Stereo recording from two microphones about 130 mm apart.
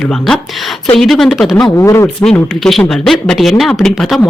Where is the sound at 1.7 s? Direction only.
20° left (ahead or behind).